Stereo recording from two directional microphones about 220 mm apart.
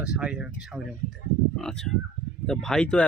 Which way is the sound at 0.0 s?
5° right (ahead or behind).